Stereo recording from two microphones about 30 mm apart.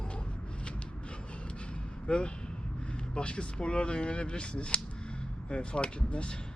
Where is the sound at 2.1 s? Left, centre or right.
Left.